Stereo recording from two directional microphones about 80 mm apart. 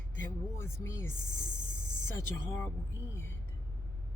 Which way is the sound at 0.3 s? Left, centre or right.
Left.